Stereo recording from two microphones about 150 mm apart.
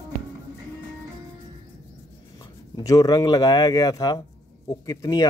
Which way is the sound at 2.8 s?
25° left (ahead or behind).